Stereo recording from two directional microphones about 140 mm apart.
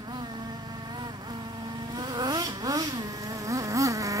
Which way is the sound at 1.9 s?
30° right (ahead or behind).